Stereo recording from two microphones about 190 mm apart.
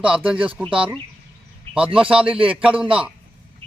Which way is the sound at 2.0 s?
5° right (ahead or behind).